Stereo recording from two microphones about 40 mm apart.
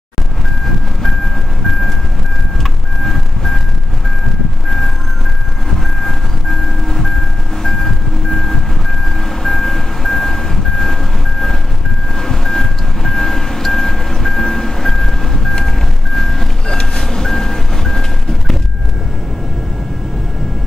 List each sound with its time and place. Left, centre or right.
2.6 s vehicle: centre
5.9 s music: centre
12.2 s mallet percussion: centre
16.2 s music: centre